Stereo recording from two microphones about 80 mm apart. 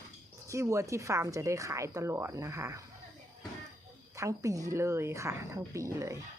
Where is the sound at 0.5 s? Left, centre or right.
Right.